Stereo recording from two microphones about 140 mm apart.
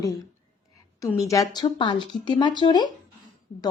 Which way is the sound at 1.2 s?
25° left (ahead or behind).